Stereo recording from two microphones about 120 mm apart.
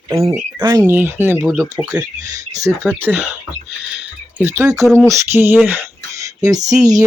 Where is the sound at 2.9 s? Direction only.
15° right (ahead or behind).